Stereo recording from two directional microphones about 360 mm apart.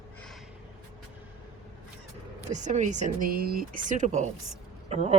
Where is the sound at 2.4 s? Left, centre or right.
Centre.